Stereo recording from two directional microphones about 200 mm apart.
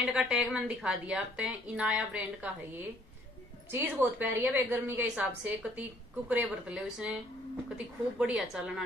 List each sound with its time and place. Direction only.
0.0 s a woman's voice: 5° right (ahead or behind)